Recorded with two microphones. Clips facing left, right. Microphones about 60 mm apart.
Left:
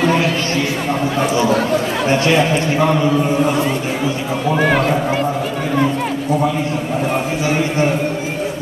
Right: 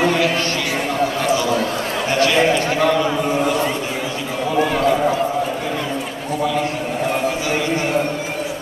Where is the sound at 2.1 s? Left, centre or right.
Left.